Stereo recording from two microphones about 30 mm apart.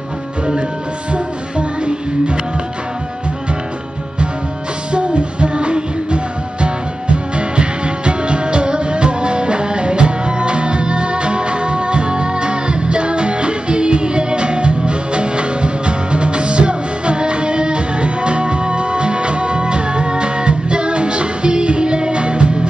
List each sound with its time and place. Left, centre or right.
1.1 s music: right
4.9 s music: right